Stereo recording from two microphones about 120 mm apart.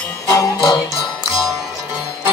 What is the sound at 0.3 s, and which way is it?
Music, 25° left (ahead or behind).